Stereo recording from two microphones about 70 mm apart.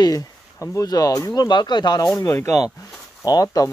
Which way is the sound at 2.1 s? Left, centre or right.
Left.